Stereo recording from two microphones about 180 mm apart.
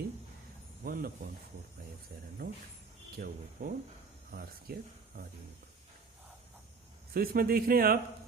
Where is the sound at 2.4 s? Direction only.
50° right (ahead or behind).